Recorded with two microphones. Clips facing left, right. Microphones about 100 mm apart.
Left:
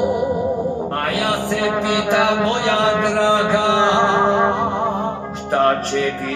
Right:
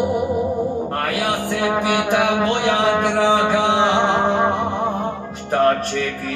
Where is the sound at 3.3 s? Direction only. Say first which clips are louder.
Even; 15° right (ahead or behind).